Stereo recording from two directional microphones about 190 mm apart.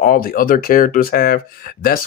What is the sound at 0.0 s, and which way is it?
Speech, 50° left (ahead or behind).